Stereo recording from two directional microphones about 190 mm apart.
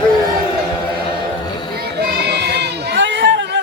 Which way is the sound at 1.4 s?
20° left (ahead or behind).